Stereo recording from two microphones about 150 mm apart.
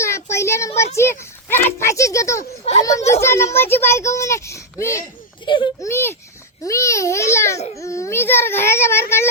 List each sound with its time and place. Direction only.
0.0 s child singing: 20° left (ahead or behind)
0.9 s a child's voice: 15° left (ahead or behind)
2.7 s a child's voice: 45° left (ahead or behind)
3.2 s a child's voice: 20° left (ahead or behind)
5.5 s a child's voice: 30° left (ahead or behind)
5.9 s a child's voice: 15° left (ahead or behind)